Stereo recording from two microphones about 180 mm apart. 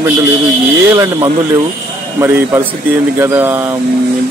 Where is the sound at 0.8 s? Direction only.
15° right (ahead or behind).